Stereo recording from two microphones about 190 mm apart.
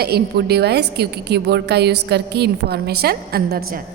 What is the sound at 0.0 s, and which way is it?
A woman's voice, 60° right (ahead or behind).